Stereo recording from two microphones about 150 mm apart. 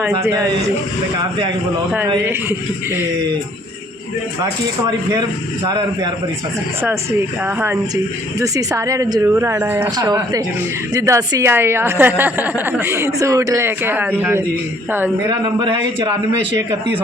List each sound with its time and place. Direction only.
0.1 s speech: 20° right (ahead or behind)
2.2 s a woman's voice: 15° right (ahead or behind)
5.6 s speech: 25° right (ahead or behind)
7.4 s a woman's voice: 15° right (ahead or behind)
10.0 s a woman's voice: 25° right (ahead or behind)
15.3 s speech: 25° right (ahead or behind)